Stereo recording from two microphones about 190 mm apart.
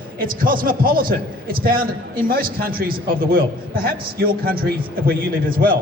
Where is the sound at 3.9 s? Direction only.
50° right (ahead or behind).